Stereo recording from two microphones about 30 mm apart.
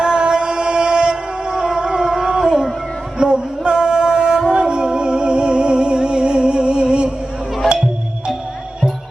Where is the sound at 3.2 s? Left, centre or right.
Right.